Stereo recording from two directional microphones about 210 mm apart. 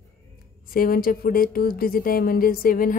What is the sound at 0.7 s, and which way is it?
A woman's voice, 45° left (ahead or behind).